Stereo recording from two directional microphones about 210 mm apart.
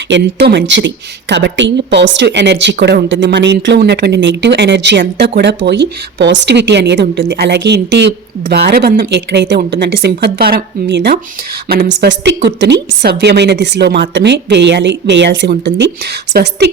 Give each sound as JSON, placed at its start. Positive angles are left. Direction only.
{"t": 0.1, "sound": "speech", "side_deg": -55}